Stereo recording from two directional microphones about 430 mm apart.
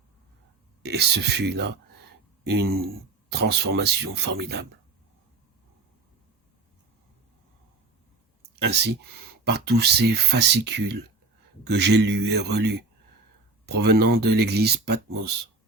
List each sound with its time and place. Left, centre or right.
0.8 s speech: right
8.5 s speech: right